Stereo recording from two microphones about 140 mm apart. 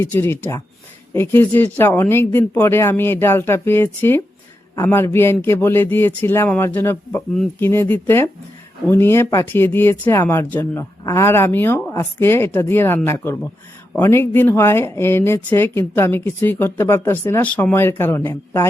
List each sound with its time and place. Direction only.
0.0 s speech: 15° left (ahead or behind)